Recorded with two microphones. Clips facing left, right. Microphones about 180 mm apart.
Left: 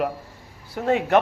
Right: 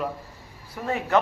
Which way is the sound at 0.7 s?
75° left (ahead or behind).